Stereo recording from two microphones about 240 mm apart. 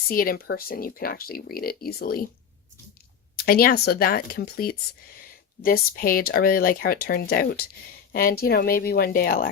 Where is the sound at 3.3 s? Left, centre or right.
Left.